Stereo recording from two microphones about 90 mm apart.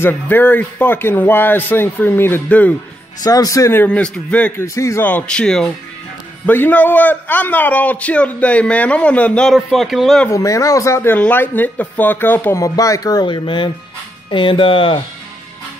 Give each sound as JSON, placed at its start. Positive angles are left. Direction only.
{"t": 0.0, "sound": "speech", "side_deg": 20}
{"t": 3.2, "sound": "speech", "side_deg": 45}
{"t": 3.7, "sound": "a man's voice", "side_deg": 15}
{"t": 4.6, "sound": "speech", "side_deg": 35}
{"t": 5.0, "sound": "a man's voice", "side_deg": 15}
{"t": 6.4, "sound": "a man's voice", "side_deg": 20}
{"t": 9.6, "sound": "speech", "side_deg": 0}
{"t": 10.3, "sound": "speech", "side_deg": 35}
{"t": 11.1, "sound": "speech", "side_deg": 20}
{"t": 12.5, "sound": "speech", "side_deg": 40}
{"t": 13.3, "sound": "speech", "side_deg": 70}